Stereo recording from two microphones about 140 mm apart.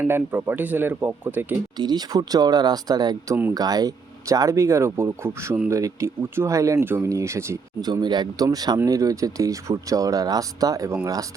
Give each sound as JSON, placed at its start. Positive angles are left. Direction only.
{"t": 0.0, "sound": "speech", "side_deg": -15}
{"t": 1.7, "sound": "speech", "side_deg": -30}